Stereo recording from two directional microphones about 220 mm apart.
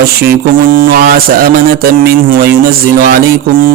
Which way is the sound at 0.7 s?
40° right (ahead or behind).